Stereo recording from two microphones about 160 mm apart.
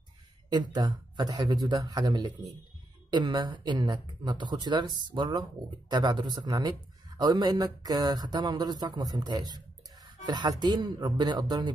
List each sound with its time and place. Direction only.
0.5 s speech: 25° right (ahead or behind)